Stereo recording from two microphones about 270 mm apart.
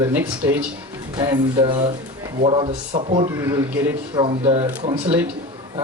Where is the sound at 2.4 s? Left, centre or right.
Right.